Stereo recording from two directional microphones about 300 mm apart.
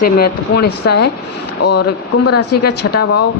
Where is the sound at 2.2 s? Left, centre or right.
Left.